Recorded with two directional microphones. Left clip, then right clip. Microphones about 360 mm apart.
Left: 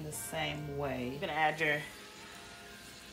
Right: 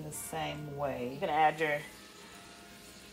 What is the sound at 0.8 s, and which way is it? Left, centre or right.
Speech, centre.